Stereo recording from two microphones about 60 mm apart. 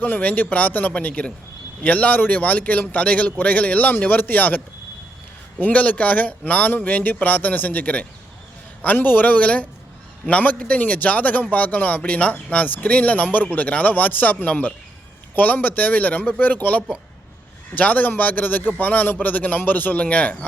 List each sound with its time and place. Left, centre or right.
0.0 s a man's voice: left